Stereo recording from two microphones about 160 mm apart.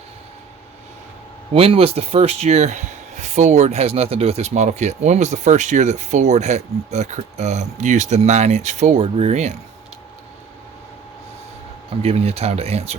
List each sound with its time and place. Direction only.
1.5 s speech: 40° right (ahead or behind)
12.0 s speech: 40° right (ahead or behind)